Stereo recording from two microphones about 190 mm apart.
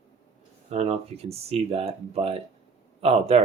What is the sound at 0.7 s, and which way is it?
Speech, 35° right (ahead or behind).